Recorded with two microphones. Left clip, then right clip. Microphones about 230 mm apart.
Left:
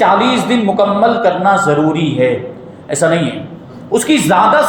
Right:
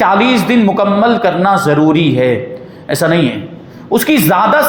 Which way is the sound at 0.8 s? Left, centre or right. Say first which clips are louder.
Left 3 dB; right.